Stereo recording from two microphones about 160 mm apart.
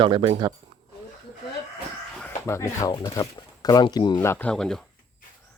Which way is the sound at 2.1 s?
5° left (ahead or behind).